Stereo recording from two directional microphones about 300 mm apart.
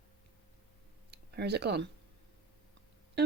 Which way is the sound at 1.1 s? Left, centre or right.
Right.